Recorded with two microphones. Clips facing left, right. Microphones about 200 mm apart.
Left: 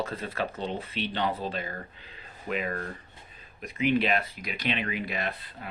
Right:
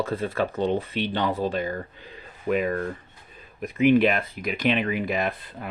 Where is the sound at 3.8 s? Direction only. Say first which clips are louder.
Right 7 dB; 50° right (ahead or behind).